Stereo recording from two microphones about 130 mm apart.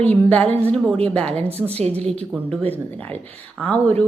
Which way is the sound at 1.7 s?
55° right (ahead or behind).